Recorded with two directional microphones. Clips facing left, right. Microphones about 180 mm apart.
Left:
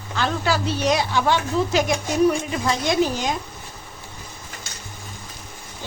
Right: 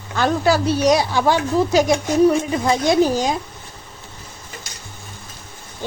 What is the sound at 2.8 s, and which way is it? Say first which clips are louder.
Speech: right 5 dB; 35° right (ahead or behind).